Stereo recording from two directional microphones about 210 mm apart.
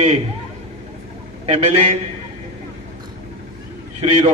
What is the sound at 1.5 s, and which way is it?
Speech, 30° right (ahead or behind).